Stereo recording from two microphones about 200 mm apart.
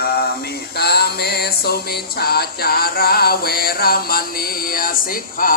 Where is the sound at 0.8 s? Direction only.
55° left (ahead or behind).